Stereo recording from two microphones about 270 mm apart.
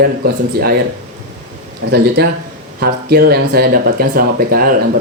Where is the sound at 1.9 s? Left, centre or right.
Right.